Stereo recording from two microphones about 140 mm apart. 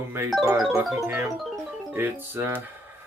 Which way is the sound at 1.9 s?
15° right (ahead or behind).